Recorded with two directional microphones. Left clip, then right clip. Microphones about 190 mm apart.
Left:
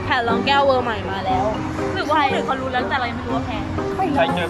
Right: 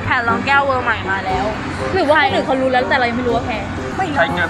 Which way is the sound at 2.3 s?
30° right (ahead or behind).